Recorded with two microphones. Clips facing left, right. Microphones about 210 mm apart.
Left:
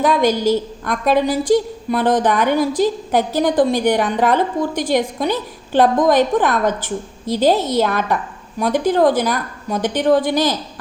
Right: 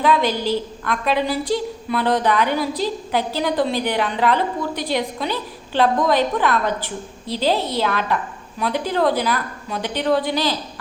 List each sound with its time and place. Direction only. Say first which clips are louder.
0.0 s a woman's voice: left 4 dB; 45° left (ahead or behind)